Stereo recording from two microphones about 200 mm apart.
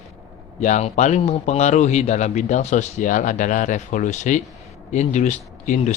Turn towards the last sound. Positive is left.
turn(degrees=35)  # may be behind; listen again after turning